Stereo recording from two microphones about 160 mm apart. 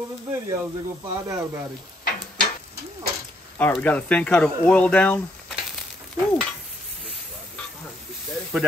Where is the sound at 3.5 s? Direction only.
10° left (ahead or behind).